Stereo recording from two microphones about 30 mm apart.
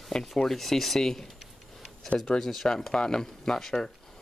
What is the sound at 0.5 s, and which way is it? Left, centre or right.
Speech, centre.